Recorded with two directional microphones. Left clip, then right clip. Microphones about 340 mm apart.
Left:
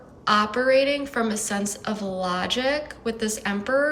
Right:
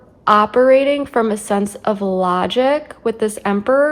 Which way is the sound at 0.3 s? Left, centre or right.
Centre.